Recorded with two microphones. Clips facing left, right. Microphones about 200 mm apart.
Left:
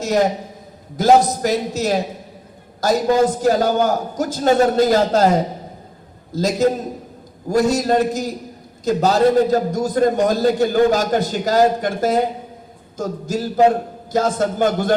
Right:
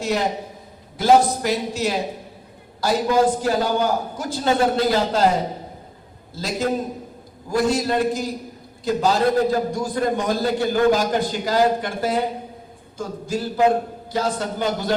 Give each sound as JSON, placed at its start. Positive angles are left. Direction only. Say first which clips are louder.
{"t": 0.0, "sound": "a man's voice", "louder": "left 5 dB", "side_deg": 45}
{"t": 6.3, "sound": "a man's voice", "louder": "left 6 dB", "side_deg": 45}